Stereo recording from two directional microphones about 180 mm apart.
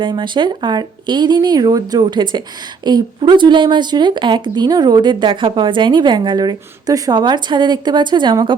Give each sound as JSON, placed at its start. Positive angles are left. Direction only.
{"t": 0.0, "sound": "speech", "side_deg": -25}